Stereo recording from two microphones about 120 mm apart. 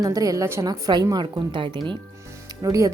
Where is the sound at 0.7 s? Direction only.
35° right (ahead or behind).